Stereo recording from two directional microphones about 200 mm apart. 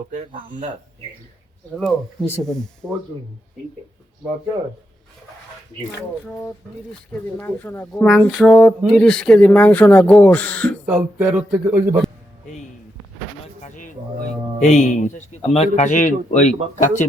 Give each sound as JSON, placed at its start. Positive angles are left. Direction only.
{"t": 1.7, "sound": "speech", "side_deg": 0}
{"t": 7.1, "sound": "speech", "side_deg": 10}
{"t": 11.2, "sound": "a man's voice", "side_deg": -10}
{"t": 13.6, "sound": "a sound", "side_deg": 40}
{"t": 14.6, "sound": "speech", "side_deg": 35}